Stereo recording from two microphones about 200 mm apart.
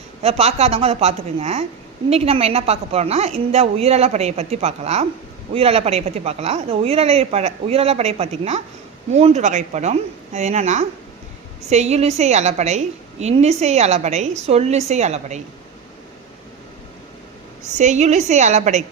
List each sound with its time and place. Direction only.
0.2 s speech: 30° right (ahead or behind)
17.7 s speech: 35° right (ahead or behind)